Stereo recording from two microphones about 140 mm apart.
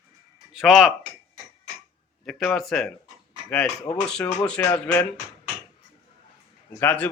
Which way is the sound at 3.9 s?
45° left (ahead or behind).